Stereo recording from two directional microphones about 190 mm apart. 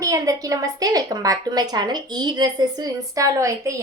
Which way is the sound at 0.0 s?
20° right (ahead or behind).